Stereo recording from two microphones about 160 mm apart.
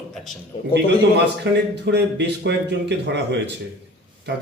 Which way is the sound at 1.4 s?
90° right.